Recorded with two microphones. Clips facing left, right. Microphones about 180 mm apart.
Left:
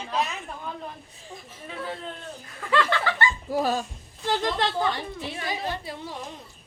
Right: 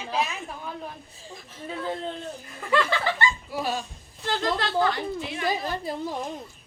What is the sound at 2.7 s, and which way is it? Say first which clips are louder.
Speech: even; 10° right (ahead or behind).